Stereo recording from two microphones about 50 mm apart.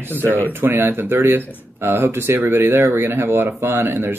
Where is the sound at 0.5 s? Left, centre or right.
Right.